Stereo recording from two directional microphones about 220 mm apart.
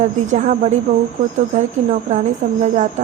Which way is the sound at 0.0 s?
35° right (ahead or behind).